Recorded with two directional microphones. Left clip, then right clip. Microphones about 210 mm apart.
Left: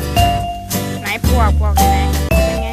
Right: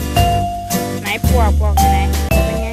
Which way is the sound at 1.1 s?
10° right (ahead or behind).